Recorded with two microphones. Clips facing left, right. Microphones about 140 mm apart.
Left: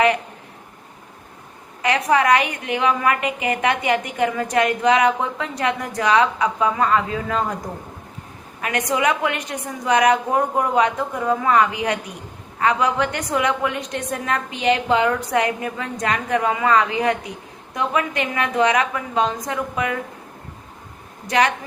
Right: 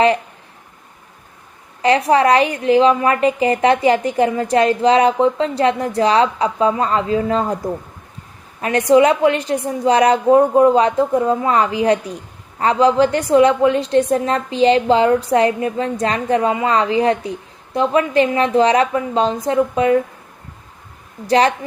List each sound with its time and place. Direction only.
1.8 s a woman's voice: 30° right (ahead or behind)
8.6 s a woman's voice: 30° right (ahead or behind)
21.2 s a woman's voice: 30° right (ahead or behind)